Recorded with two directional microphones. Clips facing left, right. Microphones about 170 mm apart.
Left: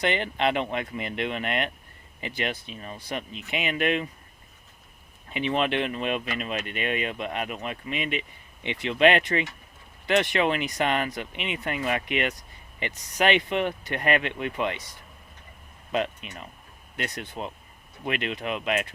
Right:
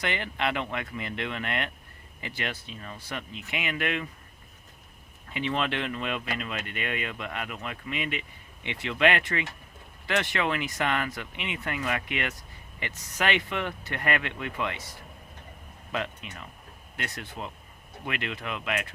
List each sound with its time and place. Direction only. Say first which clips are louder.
0.0 s speech: left 5 dB; 25° left (ahead or behind)
5.3 s speech: left 4 dB; 20° left (ahead or behind)
15.9 s speech: left 5 dB; 20° left (ahead or behind)